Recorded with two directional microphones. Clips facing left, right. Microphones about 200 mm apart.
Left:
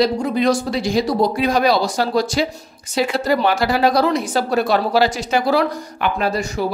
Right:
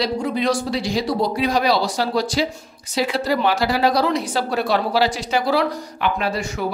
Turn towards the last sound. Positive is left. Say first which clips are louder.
# left 3 dB
turn(degrees=40)  # may be behind; listen again after turning